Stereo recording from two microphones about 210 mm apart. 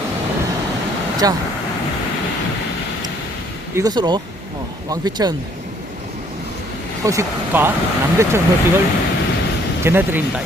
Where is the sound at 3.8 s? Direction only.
20° right (ahead or behind).